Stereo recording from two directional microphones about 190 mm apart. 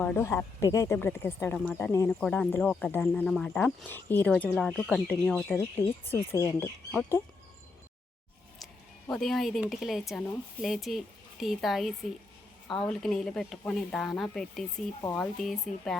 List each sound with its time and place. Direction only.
0.0 s speech: 10° left (ahead or behind)
2.0 s speech: 5° left (ahead or behind)
6.1 s speech: 15° left (ahead or behind)
9.0 s speech: centre (ahead or behind)